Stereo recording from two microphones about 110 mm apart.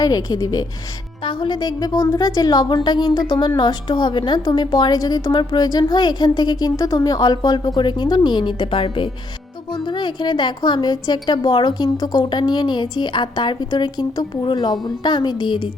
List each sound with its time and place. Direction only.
0.0 s a woman's voice: 35° left (ahead or behind)
1.2 s a woman's voice: 50° left (ahead or behind)